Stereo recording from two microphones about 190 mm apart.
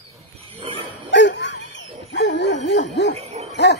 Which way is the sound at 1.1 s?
70° left (ahead or behind).